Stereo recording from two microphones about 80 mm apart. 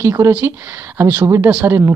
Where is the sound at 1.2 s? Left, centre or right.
Right.